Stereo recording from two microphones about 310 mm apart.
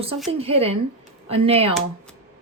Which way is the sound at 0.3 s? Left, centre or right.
Centre.